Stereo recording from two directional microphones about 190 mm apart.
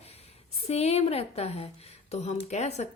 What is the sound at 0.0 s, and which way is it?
Speech, 35° left (ahead or behind).